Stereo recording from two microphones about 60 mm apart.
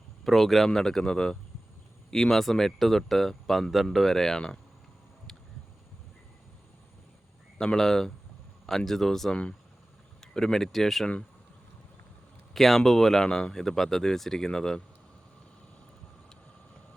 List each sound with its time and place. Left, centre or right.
0.3 s speech: centre
7.6 s speech: centre
9.3 s speech: centre
12.5 s speech: centre